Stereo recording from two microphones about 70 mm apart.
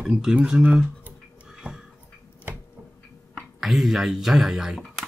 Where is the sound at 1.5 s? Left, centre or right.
Centre.